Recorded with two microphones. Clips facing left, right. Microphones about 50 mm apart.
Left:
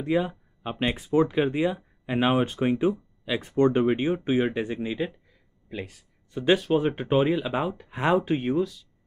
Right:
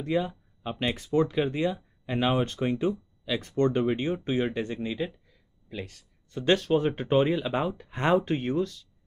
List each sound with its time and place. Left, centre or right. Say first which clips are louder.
0.0 s speech: left 3 dB; centre